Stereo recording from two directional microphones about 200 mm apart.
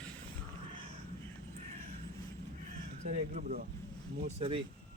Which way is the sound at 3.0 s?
35° right (ahead or behind).